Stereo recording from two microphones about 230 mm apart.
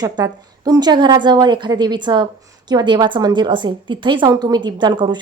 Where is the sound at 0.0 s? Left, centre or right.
Centre.